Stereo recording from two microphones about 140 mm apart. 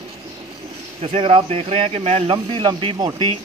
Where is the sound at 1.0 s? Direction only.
40° right (ahead or behind).